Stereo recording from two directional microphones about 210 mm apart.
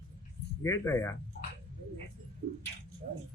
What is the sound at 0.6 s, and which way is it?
Speech, 15° left (ahead or behind).